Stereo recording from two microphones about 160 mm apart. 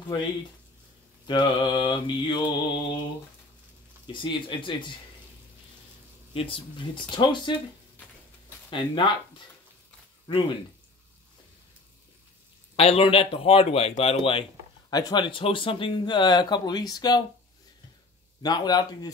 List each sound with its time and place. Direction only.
1.2 s speech: 30° left (ahead or behind)
4.1 s a man's voice: 30° left (ahead or behind)
6.3 s a man's voice: 35° left (ahead or behind)
8.6 s speech: 30° left (ahead or behind)
10.3 s a man's voice: 30° left (ahead or behind)
12.7 s a man's voice: 40° left (ahead or behind)
14.9 s speech: 25° left (ahead or behind)
18.4 s speech: 25° left (ahead or behind)